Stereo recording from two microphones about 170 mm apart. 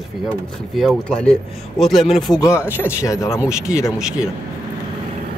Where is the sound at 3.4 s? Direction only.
5° right (ahead or behind).